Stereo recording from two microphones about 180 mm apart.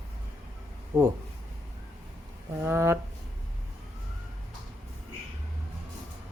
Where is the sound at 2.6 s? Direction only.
15° right (ahead or behind).